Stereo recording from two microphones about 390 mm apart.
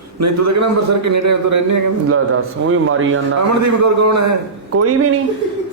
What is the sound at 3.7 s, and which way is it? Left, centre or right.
A man's voice, right.